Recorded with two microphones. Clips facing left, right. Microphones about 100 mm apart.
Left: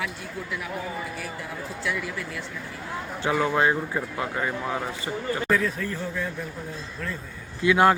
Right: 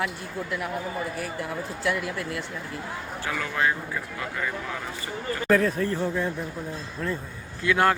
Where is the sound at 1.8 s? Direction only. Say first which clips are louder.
Right 3 dB; 60° right (ahead or behind).